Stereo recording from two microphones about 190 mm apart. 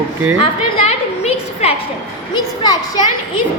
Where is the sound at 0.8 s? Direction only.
35° left (ahead or behind).